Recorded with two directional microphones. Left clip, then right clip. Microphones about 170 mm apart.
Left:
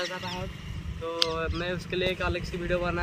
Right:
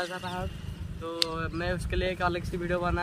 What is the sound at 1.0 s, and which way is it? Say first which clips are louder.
Speech: left 3 dB; 10° right (ahead or behind).